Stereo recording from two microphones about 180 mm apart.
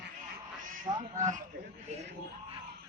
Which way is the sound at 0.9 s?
30° right (ahead or behind).